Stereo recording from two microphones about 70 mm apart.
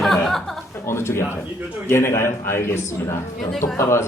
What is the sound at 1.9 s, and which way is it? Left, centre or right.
Speech, left.